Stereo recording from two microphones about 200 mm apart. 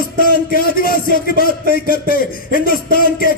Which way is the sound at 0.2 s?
45° left (ahead or behind).